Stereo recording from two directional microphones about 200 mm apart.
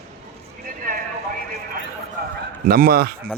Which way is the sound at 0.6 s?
45° right (ahead or behind).